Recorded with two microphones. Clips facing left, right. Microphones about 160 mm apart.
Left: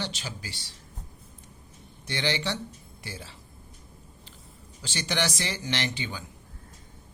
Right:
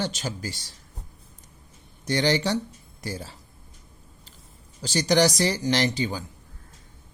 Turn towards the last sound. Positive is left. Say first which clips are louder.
# right 8 dB
turn(degrees=-40)  # may be behind; listen again after turning